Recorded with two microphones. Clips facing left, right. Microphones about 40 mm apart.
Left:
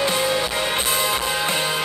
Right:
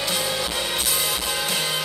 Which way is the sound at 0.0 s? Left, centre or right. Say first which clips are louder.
Left 5 dB; left.